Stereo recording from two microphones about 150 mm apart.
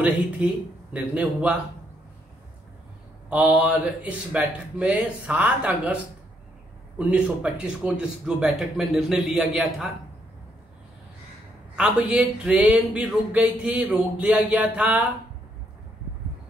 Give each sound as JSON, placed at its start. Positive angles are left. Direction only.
{"t": 0.9, "sound": "speech", "side_deg": -10}
{"t": 3.3, "sound": "speech", "side_deg": -10}
{"t": 7.0, "sound": "a man's voice", "side_deg": -10}
{"t": 11.7, "sound": "speech", "side_deg": -5}